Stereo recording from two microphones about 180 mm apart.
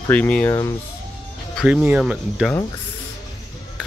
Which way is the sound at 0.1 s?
5° left (ahead or behind).